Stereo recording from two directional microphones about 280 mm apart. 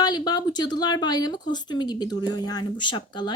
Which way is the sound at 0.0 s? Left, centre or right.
Centre.